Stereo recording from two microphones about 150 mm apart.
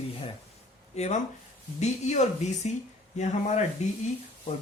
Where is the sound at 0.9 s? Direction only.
45° left (ahead or behind).